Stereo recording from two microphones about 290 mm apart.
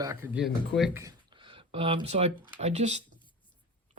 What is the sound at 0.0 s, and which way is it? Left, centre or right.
Speech, centre.